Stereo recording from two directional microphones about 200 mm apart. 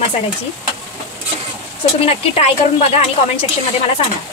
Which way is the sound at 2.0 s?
30° left (ahead or behind).